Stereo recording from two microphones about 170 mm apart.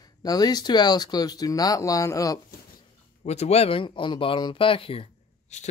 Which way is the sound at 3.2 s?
40° left (ahead or behind).